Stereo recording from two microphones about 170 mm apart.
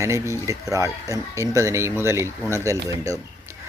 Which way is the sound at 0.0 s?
15° right (ahead or behind).